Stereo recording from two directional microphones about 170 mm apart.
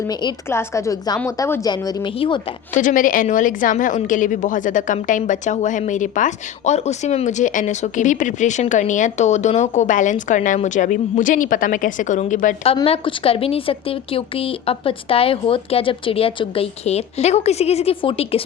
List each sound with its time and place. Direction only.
0.1 s a woman's voice: 25° left (ahead or behind)
2.7 s a woman's voice: 50° left (ahead or behind)
12.6 s a woman's voice: 35° left (ahead or behind)